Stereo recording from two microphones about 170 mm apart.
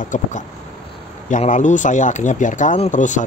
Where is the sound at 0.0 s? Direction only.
50° left (ahead or behind).